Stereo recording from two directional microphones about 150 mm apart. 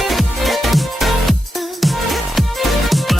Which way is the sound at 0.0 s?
Centre (ahead or behind).